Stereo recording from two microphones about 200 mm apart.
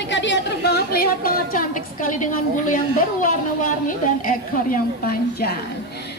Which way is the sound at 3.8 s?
45° left (ahead or behind).